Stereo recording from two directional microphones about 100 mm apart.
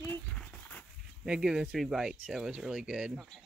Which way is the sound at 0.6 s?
15° left (ahead or behind).